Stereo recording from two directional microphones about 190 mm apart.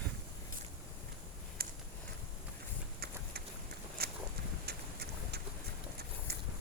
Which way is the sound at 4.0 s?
55° right (ahead or behind).